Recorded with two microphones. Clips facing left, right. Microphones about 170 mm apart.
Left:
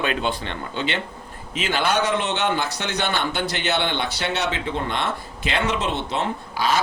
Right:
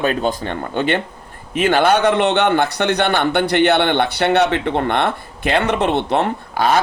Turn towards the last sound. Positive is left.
turn(degrees=-60)  # may be behind; listen again after turning